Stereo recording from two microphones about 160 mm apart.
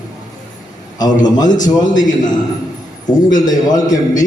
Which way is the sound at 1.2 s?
25° left (ahead or behind).